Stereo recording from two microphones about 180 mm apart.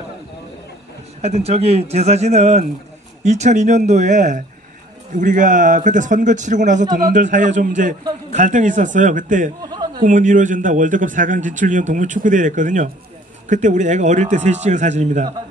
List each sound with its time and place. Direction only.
1.2 s a man's voice: 35° right (ahead or behind)
9.6 s chuckle: 20° right (ahead or behind)
10.0 s a man's voice: 45° right (ahead or behind)